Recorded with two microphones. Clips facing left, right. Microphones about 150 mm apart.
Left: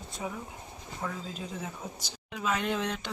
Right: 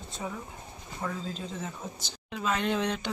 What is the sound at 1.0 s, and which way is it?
Speech, 10° left (ahead or behind).